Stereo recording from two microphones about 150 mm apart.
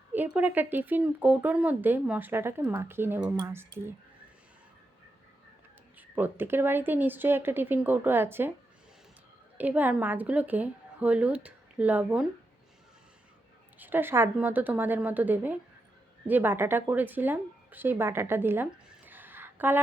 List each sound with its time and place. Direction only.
0.1 s speech: 10° right (ahead or behind)
6.0 s speech: 10° right (ahead or behind)
9.6 s speech: 10° right (ahead or behind)
13.7 s speech: 10° right (ahead or behind)